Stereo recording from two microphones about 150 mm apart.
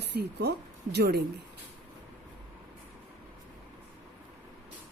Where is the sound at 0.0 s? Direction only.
90° right.